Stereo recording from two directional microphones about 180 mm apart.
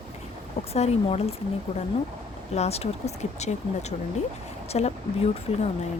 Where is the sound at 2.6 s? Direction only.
35° left (ahead or behind).